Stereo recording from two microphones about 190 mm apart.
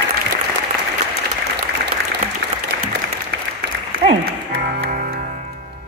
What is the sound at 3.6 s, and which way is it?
Applause, 75° right (ahead or behind).